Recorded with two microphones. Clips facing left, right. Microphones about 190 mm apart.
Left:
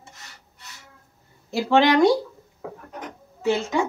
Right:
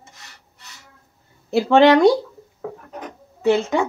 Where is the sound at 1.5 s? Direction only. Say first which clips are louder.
Right 5 dB; 60° right (ahead or behind).